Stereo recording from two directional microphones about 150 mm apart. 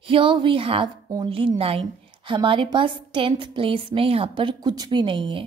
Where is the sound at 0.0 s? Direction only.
35° right (ahead or behind).